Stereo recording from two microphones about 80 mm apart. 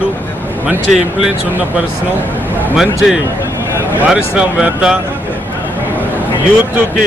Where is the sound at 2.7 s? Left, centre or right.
Centre.